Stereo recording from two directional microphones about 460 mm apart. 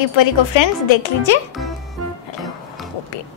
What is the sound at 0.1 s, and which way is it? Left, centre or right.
Speech, left.